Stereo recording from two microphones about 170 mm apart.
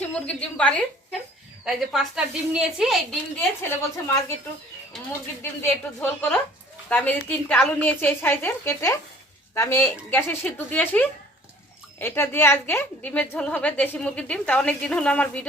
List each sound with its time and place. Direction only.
0.1 s a woman's voice: 5° left (ahead or behind)
3.3 s a woman's voice: 15° left (ahead or behind)
5.6 s a woman's voice: 5° left (ahead or behind)